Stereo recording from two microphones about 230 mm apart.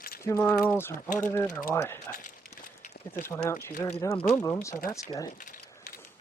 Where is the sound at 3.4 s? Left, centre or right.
Centre.